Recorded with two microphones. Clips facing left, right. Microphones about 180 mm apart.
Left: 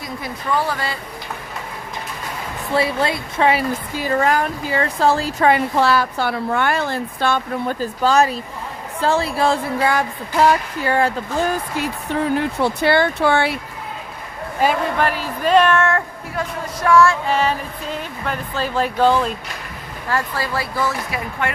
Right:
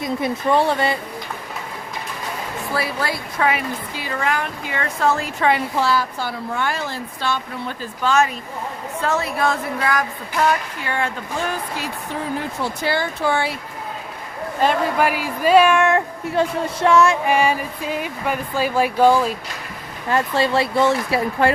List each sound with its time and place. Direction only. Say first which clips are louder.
0.0 s speech: right 7 dB; 25° right (ahead or behind)
2.7 s speech: left 6 dB; 25° left (ahead or behind)
3.9 s speech: left 6 dB; 40° left (ahead or behind)
5.5 s a woman's voice: left 3 dB; 55° left (ahead or behind); by 11.5 s 40° left (ahead or behind)
12.3 s a woman's voice: left 5 dB; 65° left (ahead or behind)
14.9 s speech: right 1 dB; 10° right (ahead or behind)
20.1 s speech: right 4 dB; 25° right (ahead or behind)